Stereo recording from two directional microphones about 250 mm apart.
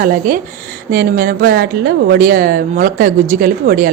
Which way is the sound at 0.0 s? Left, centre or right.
Right.